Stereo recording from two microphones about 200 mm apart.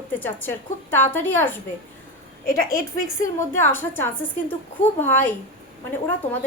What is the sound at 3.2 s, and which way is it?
A woman's voice, 10° left (ahead or behind).